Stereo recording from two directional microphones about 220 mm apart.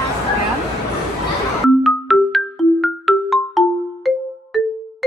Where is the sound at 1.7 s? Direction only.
Centre (ahead or behind).